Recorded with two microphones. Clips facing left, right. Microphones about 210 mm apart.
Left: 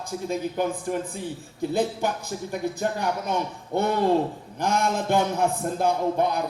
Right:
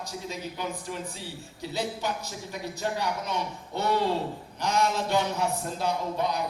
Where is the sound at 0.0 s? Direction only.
50° left (ahead or behind).